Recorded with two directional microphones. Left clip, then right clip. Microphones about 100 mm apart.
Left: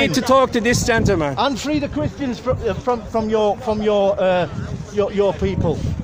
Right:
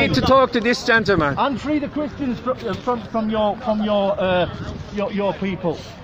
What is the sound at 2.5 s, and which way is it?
Speech, 70° left (ahead or behind).